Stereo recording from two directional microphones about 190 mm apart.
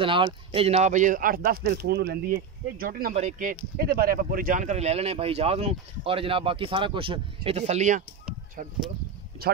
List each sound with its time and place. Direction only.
0.0 s speech: 25° right (ahead or behind)
9.4 s speech: 55° right (ahead or behind)